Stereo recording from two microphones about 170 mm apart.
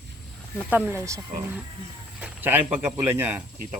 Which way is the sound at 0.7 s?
10° right (ahead or behind).